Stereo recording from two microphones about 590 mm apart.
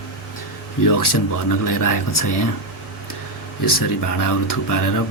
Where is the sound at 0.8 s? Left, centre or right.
Left.